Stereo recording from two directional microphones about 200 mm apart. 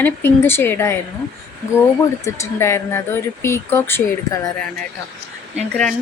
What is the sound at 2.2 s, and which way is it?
Speech, 15° left (ahead or behind).